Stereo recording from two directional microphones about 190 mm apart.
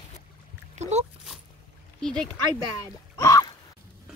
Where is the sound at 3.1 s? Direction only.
20° left (ahead or behind).